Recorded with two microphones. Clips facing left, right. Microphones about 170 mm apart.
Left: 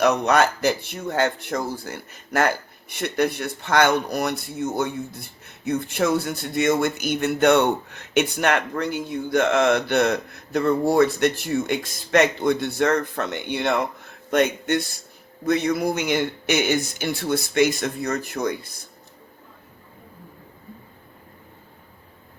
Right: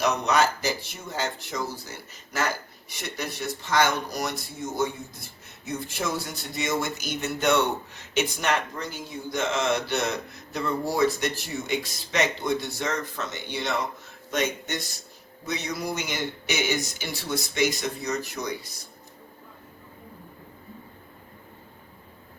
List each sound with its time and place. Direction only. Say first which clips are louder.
0.0 s speech: left 5 dB; 55° left (ahead or behind)